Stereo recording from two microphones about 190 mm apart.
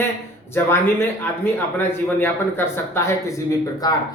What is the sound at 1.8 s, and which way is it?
Speech, 10° left (ahead or behind).